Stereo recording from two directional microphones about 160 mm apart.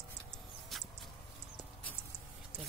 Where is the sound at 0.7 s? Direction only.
Centre (ahead or behind).